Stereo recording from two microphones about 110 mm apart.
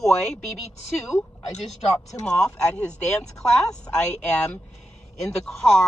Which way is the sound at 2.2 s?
10° left (ahead or behind).